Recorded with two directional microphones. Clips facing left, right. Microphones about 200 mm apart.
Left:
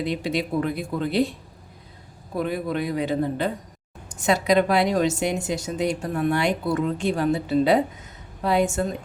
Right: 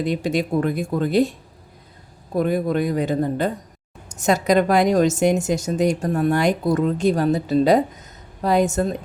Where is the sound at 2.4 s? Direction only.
45° right (ahead or behind).